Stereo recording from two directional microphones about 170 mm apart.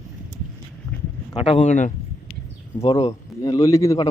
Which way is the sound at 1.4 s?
35° left (ahead or behind).